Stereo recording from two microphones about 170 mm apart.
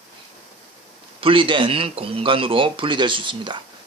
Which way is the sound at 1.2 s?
30° right (ahead or behind).